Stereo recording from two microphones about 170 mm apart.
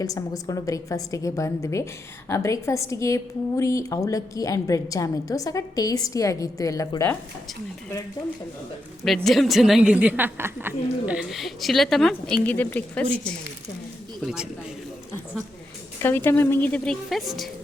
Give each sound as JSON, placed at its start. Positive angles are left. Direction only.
{"t": 0.0, "sound": "a woman's voice", "side_deg": 20}
{"t": 9.0, "sound": "a woman's voice", "side_deg": 0}
{"t": 16.0, "sound": "a woman's voice", "side_deg": 10}